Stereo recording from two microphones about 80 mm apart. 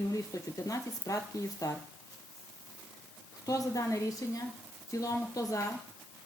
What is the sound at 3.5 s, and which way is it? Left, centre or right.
Speech, left.